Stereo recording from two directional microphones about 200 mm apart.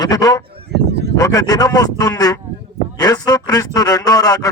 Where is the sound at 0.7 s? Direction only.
55° right (ahead or behind).